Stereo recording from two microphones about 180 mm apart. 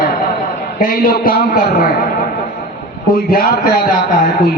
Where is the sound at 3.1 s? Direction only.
55° left (ahead or behind).